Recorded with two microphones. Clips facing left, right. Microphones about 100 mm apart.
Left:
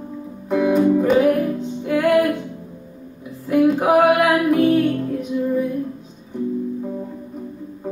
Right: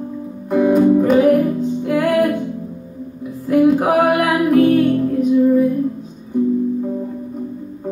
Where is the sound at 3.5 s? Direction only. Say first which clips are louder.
Right 2 dB; centre (ahead or behind).